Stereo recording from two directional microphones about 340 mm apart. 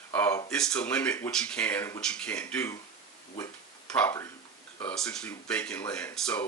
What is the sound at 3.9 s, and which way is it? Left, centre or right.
Speech, centre.